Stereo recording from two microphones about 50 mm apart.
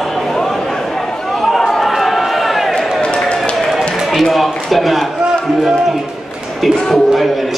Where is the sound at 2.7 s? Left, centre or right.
Centre.